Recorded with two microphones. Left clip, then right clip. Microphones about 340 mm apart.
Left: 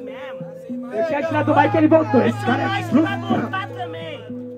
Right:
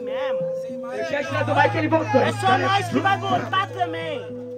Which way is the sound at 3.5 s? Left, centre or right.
Right.